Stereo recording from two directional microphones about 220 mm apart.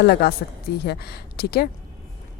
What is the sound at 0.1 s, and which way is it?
Speech, 45° left (ahead or behind).